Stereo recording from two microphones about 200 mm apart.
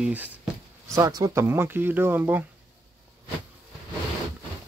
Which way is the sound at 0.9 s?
15° right (ahead or behind).